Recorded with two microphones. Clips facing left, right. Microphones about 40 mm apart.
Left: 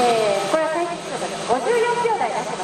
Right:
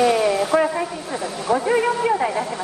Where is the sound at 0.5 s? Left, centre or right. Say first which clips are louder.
Right 1 dB; centre.